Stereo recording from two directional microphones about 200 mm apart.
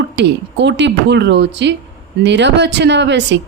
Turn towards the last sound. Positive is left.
turn(degrees=-60)  # may be behind; listen again after turning